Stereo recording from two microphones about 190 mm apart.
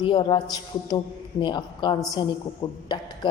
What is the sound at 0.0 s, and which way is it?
A man's voice, 25° left (ahead or behind).